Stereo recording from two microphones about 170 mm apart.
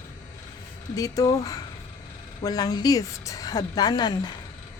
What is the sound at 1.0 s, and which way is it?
A woman's voice, 20° left (ahead or behind).